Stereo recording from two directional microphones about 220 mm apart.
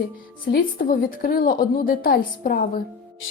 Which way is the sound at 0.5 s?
40° left (ahead or behind).